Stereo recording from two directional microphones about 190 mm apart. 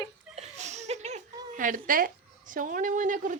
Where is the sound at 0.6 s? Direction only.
35° right (ahead or behind).